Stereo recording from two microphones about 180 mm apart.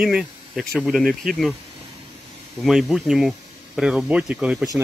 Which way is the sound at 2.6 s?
Centre (ahead or behind).